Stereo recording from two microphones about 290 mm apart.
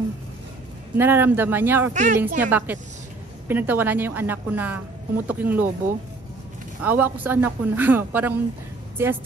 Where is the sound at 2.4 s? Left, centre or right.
Centre.